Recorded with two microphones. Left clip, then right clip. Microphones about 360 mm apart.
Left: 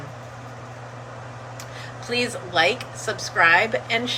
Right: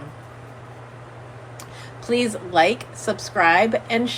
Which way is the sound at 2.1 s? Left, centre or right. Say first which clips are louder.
Right 3 dB; centre.